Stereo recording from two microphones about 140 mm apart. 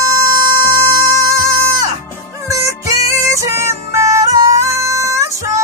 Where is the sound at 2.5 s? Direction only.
20° right (ahead or behind).